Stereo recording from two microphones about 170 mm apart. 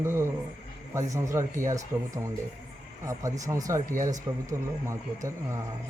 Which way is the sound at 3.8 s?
50° right (ahead or behind).